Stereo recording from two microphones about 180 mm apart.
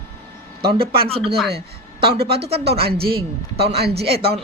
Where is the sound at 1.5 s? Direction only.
30° right (ahead or behind).